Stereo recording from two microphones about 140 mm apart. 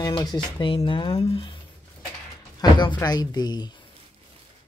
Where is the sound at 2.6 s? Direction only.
35° left (ahead or behind).